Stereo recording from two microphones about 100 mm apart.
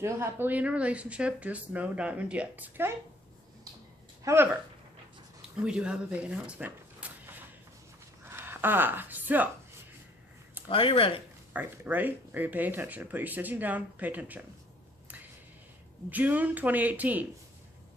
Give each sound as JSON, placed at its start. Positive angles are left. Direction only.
{"t": 0.0, "sound": "speech", "side_deg": -25}
{"t": 4.2, "sound": "speech", "side_deg": -30}
{"t": 5.6, "sound": "speech", "side_deg": -10}
{"t": 8.3, "sound": "speech", "side_deg": -25}
{"t": 10.7, "sound": "speech", "side_deg": 65}
{"t": 11.5, "sound": "speech", "side_deg": -15}
{"t": 16.0, "sound": "speech", "side_deg": -15}